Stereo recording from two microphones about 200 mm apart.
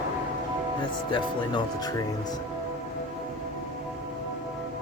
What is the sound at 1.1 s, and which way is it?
Speech, 20° left (ahead or behind).